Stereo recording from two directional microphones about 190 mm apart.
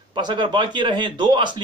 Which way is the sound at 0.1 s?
25° right (ahead or behind).